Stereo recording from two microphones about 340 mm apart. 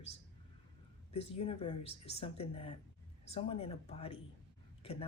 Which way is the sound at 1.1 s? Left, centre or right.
Centre.